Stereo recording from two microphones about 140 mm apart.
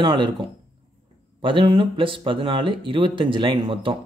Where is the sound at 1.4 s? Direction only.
35° right (ahead or behind).